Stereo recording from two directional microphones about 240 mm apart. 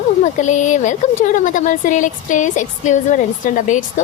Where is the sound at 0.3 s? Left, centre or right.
Left.